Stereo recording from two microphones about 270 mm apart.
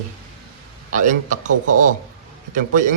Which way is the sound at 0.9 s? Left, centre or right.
Right.